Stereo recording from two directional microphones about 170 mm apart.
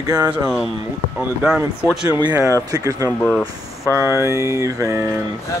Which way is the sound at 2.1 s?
25° right (ahead or behind).